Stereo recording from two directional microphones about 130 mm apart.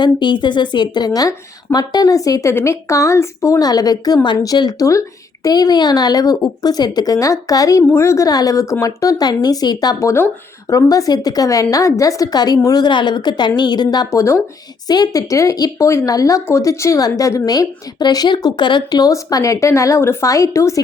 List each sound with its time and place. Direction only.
0.0 s a woman's voice: 35° left (ahead or behind)